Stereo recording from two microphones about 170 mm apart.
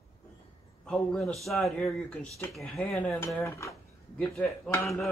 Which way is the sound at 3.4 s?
15° left (ahead or behind).